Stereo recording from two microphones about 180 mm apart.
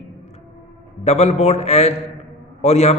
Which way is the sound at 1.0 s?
35° left (ahead or behind).